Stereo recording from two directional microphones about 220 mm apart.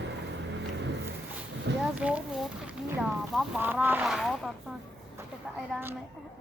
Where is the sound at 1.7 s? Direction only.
50° right (ahead or behind).